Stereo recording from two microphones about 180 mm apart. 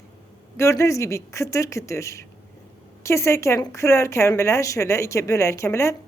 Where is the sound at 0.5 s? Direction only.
15° left (ahead or behind).